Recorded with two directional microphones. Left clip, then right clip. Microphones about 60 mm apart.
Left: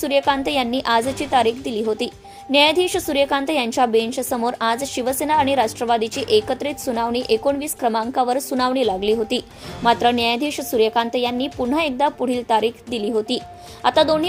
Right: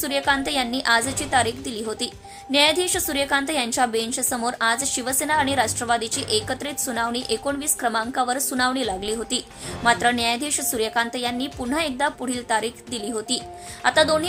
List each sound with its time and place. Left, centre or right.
0.3 s a woman's voice: left